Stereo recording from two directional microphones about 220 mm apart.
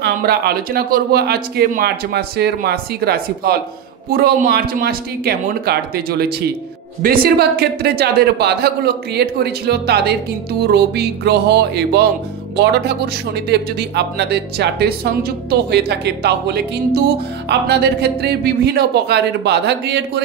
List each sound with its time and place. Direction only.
0.0 s speech: 45° right (ahead or behind)